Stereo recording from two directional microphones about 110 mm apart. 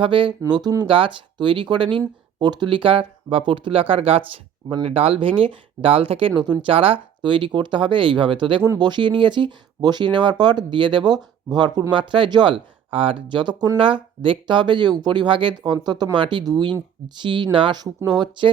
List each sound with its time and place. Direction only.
0.0 s speech: 50° right (ahead or behind)
0.9 s speech: 50° right (ahead or behind)
8.6 s speech: 35° right (ahead or behind)